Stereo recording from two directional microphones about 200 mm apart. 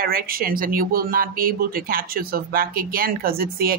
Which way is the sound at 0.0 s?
45° right (ahead or behind).